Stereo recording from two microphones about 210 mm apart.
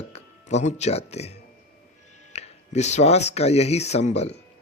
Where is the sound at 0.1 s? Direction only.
30° left (ahead or behind).